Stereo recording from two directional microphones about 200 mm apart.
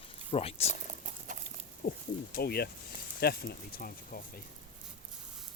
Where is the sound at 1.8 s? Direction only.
50° left (ahead or behind).